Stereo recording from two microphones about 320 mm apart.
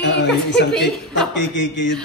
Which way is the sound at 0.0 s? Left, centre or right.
Left.